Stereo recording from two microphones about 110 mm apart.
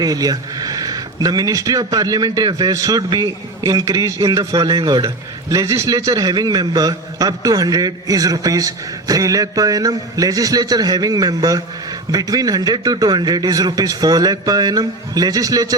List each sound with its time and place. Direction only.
0.0 s speech: 35° right (ahead or behind)